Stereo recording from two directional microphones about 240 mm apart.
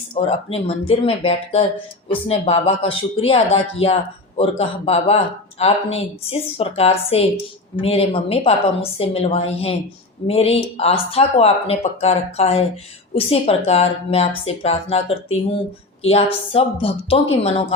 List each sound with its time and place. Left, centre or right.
0.1 s speech: left